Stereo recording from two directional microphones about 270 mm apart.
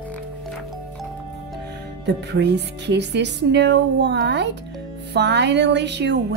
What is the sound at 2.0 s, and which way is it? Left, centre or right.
Speech, right.